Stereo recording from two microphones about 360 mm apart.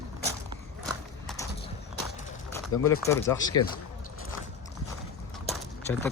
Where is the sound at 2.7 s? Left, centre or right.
Left.